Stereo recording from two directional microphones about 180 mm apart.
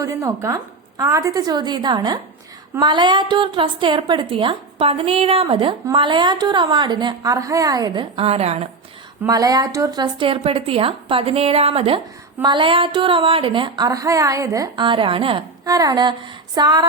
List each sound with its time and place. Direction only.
0.0 s a woman's voice: 15° right (ahead or behind); by 8.6 s 35° right (ahead or behind)
9.2 s a woman's voice: 20° right (ahead or behind)